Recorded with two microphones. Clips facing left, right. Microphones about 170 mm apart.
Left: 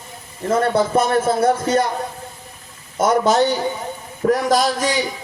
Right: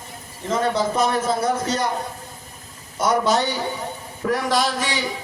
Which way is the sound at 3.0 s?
50° left (ahead or behind).